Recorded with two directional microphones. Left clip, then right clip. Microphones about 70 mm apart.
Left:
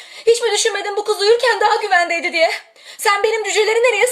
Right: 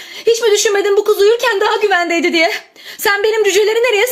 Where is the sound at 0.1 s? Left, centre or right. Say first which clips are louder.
Right 3 dB; left.